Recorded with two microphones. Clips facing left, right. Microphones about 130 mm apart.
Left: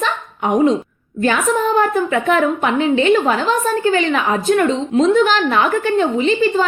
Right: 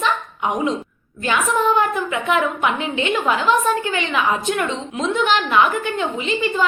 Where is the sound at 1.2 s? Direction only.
40° left (ahead or behind).